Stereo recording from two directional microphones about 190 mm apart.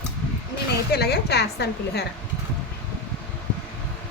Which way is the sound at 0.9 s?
60° left (ahead or behind).